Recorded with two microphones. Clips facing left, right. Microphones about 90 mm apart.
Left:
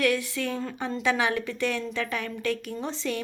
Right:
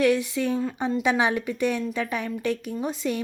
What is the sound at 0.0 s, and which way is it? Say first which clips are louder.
A woman's voice: right 4 dB; 20° right (ahead or behind).